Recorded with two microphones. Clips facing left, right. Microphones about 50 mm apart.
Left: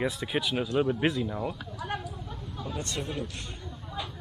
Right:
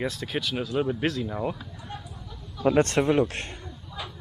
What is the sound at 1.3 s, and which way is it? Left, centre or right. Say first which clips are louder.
Speech: right 3 dB; centre.